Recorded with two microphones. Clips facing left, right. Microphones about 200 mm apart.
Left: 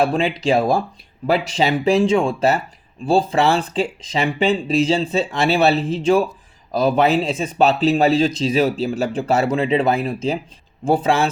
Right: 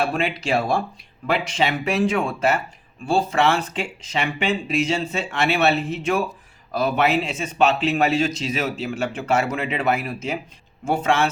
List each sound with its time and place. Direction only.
0.1 s speech: 30° left (ahead or behind)